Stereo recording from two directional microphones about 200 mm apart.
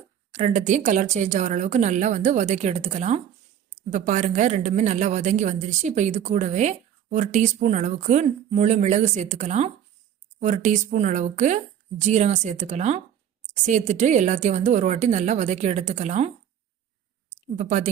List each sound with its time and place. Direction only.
0.3 s a woman's voice: 40° right (ahead or behind)
17.3 s speech: 35° right (ahead or behind)